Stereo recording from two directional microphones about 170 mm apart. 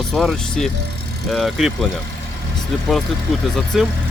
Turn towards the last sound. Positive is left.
turn(degrees=0)  # may be behind; listen again after turning